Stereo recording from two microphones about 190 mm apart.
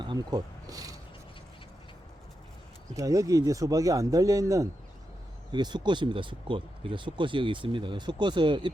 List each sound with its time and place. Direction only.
0.0 s speech: 25° right (ahead or behind)
2.9 s speech: 20° right (ahead or behind)